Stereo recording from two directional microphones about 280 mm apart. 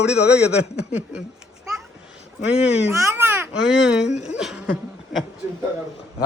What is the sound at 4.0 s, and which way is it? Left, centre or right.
Speech, left.